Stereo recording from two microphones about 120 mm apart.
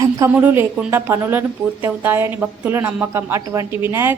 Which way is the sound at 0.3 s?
15° right (ahead or behind).